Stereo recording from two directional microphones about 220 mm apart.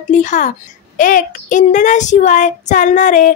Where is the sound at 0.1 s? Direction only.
35° left (ahead or behind).